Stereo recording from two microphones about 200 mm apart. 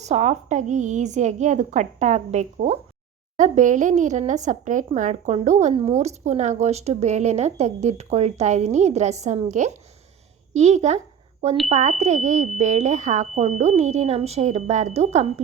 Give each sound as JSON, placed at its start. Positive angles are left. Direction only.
{"t": 0.0, "sound": "a woman's voice", "side_deg": -35}